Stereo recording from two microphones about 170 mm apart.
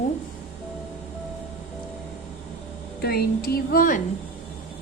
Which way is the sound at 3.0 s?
65° left (ahead or behind).